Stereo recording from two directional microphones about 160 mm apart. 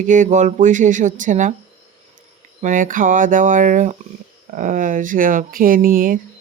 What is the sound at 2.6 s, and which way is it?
Speech, 55° right (ahead or behind).